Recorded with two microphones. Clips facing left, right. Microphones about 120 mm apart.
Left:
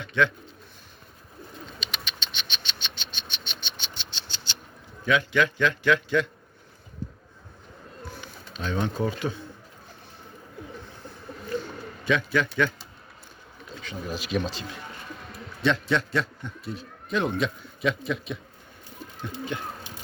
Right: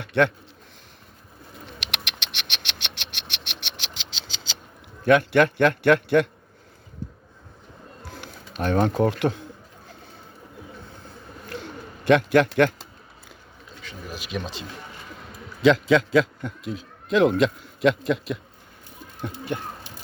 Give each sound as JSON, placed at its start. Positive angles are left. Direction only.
{"t": 0.0, "sound": "a man's voice", "side_deg": -60}
{"t": 1.6, "sound": "bird", "side_deg": -75}
{"t": 5.0, "sound": "a man's voice", "side_deg": -60}
{"t": 8.2, "sound": "speech", "side_deg": -60}
{"t": 12.0, "sound": "a man's voice", "side_deg": -70}
{"t": 14.1, "sound": "speech", "side_deg": -15}
{"t": 15.6, "sound": "a man's voice", "side_deg": -90}
{"t": 19.5, "sound": "a sound", "side_deg": -50}